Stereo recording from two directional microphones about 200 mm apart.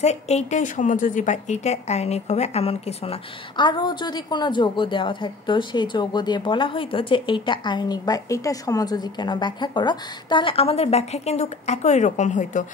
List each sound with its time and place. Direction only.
0.0 s a woman's voice: 35° left (ahead or behind)